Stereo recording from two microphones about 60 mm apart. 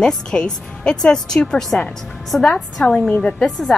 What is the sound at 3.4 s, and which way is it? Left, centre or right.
Speech, centre.